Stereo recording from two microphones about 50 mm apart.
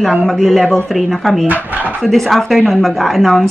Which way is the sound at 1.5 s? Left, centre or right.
Right.